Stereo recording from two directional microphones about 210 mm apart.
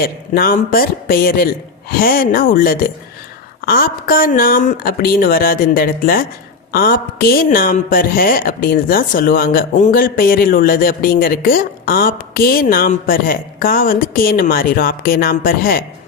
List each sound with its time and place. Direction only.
0.0 s a woman's voice: 45° left (ahead or behind)